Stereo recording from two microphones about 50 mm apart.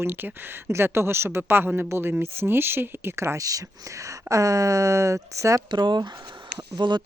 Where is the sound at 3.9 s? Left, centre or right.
Right.